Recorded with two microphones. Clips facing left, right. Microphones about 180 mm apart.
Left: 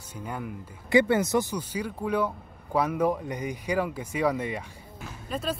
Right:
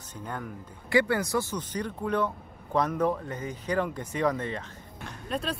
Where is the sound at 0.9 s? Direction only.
20° left (ahead or behind).